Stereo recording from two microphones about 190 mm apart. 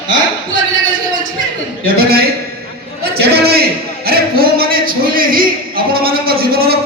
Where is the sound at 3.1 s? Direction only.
55° right (ahead or behind).